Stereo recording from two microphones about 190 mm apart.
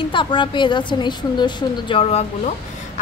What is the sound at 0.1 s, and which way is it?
A woman's voice, 25° left (ahead or behind).